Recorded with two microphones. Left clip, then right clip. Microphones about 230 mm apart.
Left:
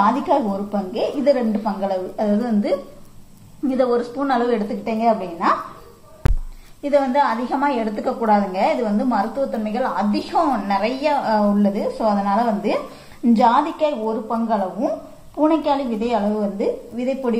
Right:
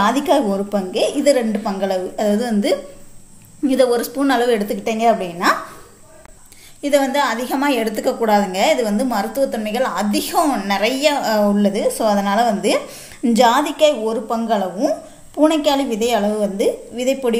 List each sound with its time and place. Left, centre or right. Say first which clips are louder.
0.0 s a woman's voice: right 2 dB; right
6.8 s a woman's voice: right 1 dB; right